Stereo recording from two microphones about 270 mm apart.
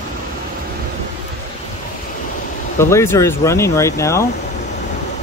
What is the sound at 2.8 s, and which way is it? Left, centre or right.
Speech, centre.